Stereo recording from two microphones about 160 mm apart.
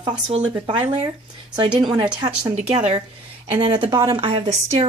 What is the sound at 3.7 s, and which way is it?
Speech, 25° right (ahead or behind).